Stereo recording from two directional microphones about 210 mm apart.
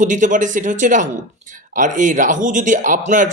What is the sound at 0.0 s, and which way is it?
Speech, 35° right (ahead or behind).